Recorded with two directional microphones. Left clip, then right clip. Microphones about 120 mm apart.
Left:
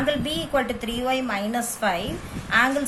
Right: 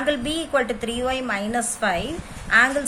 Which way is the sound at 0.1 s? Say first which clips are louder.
Right 4 dB; 30° right (ahead or behind).